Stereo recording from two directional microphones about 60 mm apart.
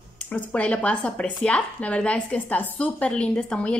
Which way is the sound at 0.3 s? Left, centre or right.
Left.